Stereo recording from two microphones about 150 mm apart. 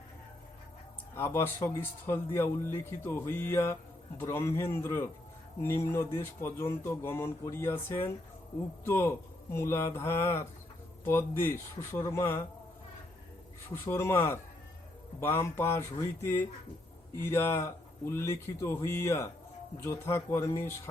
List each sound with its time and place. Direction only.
1.1 s a man's voice: 15° left (ahead or behind)
13.8 s a man's voice: 15° left (ahead or behind)